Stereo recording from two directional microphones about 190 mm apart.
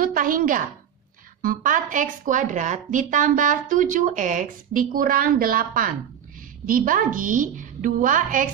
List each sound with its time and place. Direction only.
0.0 s a woman's voice: 45° right (ahead or behind)